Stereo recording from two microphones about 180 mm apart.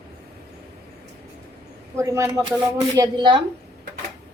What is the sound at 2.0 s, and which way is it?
Speech, 15° right (ahead or behind).